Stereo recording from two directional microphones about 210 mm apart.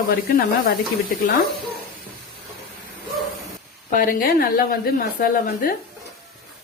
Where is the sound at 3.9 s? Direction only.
40° left (ahead or behind).